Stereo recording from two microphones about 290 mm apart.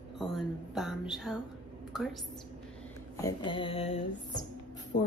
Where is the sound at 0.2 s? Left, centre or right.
Centre.